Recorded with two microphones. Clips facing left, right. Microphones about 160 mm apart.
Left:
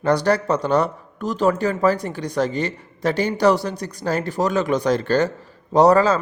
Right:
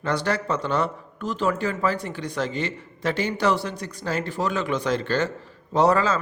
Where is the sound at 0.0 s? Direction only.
40° left (ahead or behind).